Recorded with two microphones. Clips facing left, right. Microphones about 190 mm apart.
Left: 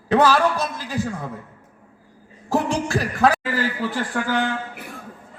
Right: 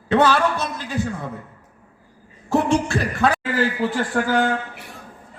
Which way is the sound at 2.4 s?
35° left (ahead or behind).